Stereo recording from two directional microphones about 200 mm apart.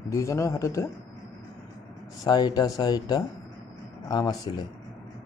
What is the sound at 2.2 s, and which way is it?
A man's voice, 20° left (ahead or behind).